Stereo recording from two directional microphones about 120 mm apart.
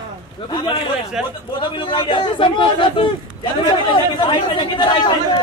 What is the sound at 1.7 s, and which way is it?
Speech, 40° left (ahead or behind).